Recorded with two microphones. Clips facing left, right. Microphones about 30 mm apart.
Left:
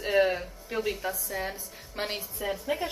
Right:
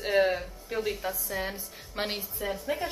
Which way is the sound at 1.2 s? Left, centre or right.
Centre.